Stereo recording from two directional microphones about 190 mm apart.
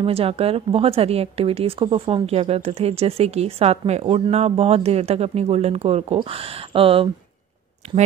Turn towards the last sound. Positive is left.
turn(degrees=-35)  # may be behind; listen again after turning